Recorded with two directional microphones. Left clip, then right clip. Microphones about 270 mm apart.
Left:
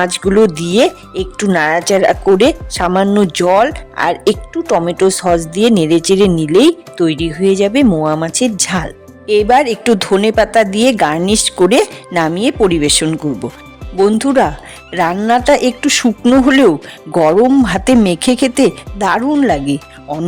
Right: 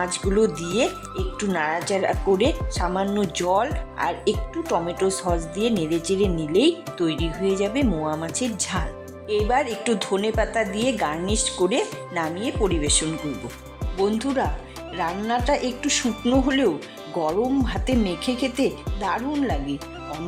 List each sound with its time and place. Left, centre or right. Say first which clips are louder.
0.0 s speech: left 11 dB; left